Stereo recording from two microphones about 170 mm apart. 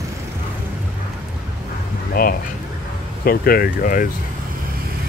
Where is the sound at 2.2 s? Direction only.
55° left (ahead or behind).